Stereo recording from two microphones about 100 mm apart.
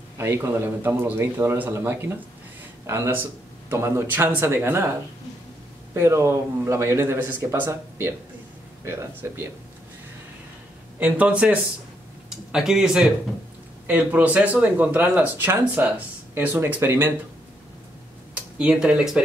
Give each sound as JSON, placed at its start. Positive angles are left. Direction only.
{"t": 0.2, "sound": "speech", "side_deg": -25}
{"t": 5.9, "sound": "speech", "side_deg": -25}
{"t": 11.0, "sound": "speech", "side_deg": -15}
{"t": 18.3, "sound": "speech", "side_deg": -10}